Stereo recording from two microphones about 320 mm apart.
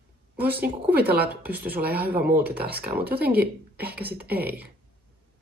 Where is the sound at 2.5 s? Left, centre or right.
Right.